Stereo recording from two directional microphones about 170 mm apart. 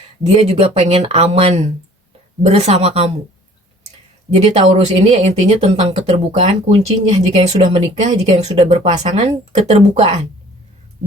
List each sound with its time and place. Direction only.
0.2 s speech: 40° right (ahead or behind)
4.4 s speech: 40° right (ahead or behind)